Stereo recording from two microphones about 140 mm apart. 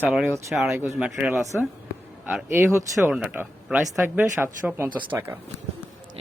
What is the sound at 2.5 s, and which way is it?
Speech, 20° right (ahead or behind).